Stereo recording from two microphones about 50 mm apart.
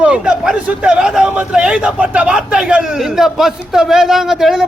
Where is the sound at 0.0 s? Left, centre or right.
Right.